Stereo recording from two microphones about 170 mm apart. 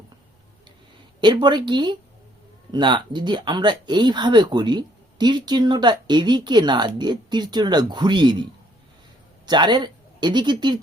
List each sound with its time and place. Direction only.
1.2 s speech: 25° right (ahead or behind)
9.5 s speech: 25° right (ahead or behind)